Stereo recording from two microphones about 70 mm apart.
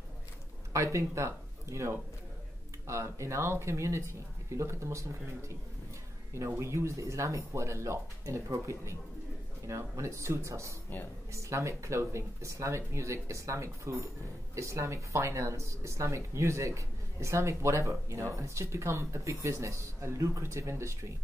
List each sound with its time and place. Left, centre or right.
0.9 s speech: right